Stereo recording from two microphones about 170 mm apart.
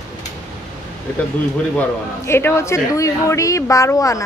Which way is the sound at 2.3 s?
15° left (ahead or behind).